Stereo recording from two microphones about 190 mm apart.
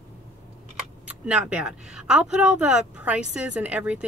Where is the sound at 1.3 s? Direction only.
5° right (ahead or behind).